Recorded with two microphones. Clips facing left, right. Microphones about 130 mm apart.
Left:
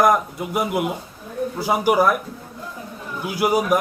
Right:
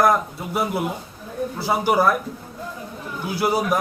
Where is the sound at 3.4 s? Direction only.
10° left (ahead or behind).